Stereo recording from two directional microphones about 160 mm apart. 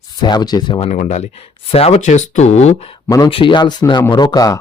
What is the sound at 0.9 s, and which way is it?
Speech, 50° left (ahead or behind).